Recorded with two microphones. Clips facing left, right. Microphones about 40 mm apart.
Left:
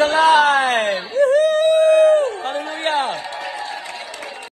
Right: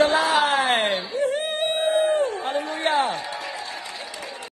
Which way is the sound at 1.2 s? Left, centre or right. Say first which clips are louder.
Left 12 dB; left.